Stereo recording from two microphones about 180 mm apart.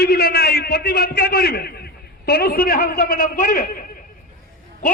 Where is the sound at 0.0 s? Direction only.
60° left (ahead or behind).